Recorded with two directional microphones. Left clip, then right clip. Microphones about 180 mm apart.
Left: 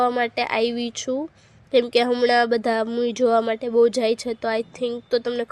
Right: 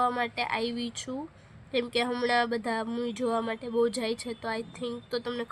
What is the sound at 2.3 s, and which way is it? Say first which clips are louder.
Speech: left 8 dB; 35° left (ahead or behind).